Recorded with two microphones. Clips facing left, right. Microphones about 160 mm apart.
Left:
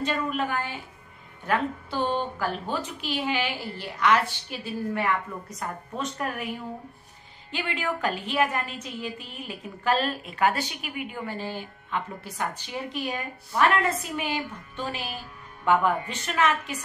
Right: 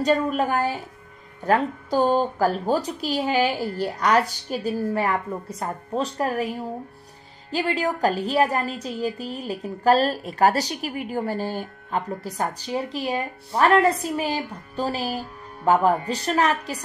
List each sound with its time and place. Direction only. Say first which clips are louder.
0.0 s a woman's voice: right 7 dB; 40° right (ahead or behind)
7.5 s a woman's voice: right 6 dB; 40° right (ahead or behind)